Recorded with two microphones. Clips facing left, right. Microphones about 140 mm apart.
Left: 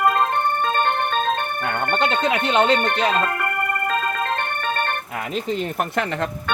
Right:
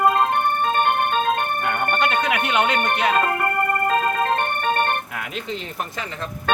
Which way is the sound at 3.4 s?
35° right (ahead or behind).